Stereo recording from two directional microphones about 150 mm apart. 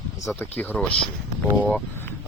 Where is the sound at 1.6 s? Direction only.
5° left (ahead or behind).